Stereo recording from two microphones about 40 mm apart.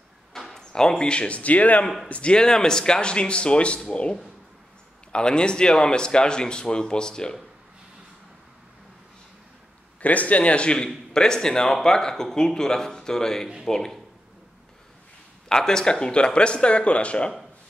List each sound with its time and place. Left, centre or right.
0.3 s a sound: centre
0.6 s speech: centre
1.4 s a man's voice: left
2.3 s speech: centre
5.1 s speech: left
10.0 s a man's voice: left; by 13.9 s centre
15.4 s speech: centre; by 17.3 s left